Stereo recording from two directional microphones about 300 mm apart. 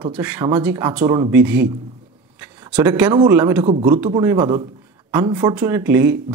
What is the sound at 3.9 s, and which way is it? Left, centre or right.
Speech, centre.